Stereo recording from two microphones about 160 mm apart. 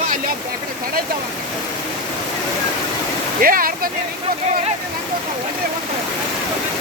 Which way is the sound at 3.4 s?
65° right (ahead or behind).